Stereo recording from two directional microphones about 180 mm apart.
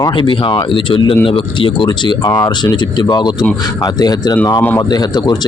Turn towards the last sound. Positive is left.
turn(degrees=25)  # may be behind; listen again after turning